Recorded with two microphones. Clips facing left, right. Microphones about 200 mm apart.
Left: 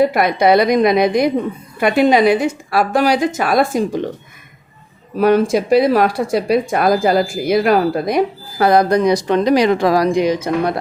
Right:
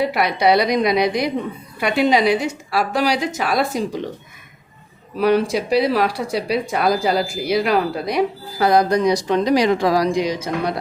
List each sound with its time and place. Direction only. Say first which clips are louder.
0.0 s speech: left 4 dB; 50° left (ahead or behind)
5.1 s speech: left 4 dB; 45° left (ahead or behind)